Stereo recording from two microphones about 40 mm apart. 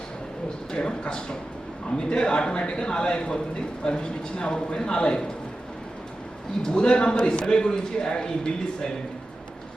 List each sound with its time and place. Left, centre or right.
0.7 s a man's voice: left
6.6 s a man's voice: left